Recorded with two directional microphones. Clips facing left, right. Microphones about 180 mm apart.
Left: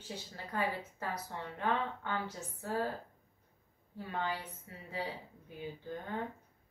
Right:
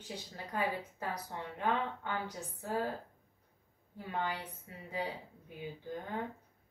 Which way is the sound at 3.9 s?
15° right (ahead or behind).